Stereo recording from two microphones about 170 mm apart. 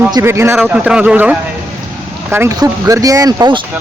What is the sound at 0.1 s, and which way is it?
Speech, 15° right (ahead or behind).